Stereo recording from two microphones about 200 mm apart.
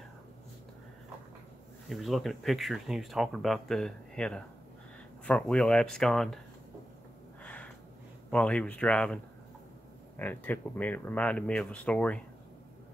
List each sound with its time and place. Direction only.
1.9 s speech: centre (ahead or behind)
7.4 s snort: 5° left (ahead or behind)
8.3 s speech: 5° left (ahead or behind)